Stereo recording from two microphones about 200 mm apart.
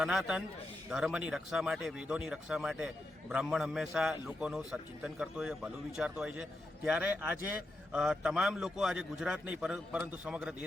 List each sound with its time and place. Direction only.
0.0 s speech: 5° right (ahead or behind)